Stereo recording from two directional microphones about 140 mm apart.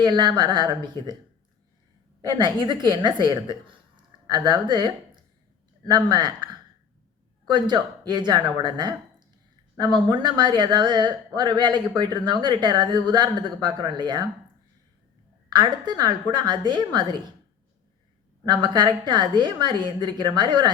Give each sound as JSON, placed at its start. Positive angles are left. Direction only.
{"t": 0.0, "sound": "speech", "side_deg": -30}
{"t": 2.3, "sound": "speech", "side_deg": -35}
{"t": 15.4, "sound": "speech", "side_deg": -35}
{"t": 18.4, "sound": "speech", "side_deg": -35}